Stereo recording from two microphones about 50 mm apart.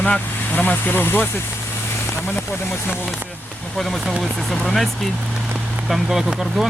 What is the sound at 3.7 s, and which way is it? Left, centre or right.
Speech, centre.